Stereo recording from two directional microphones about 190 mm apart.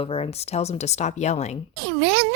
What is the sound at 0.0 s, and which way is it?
Speech, 30° left (ahead or behind).